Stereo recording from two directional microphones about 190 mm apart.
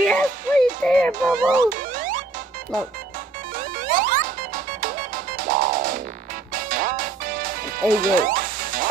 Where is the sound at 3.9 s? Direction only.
45° right (ahead or behind).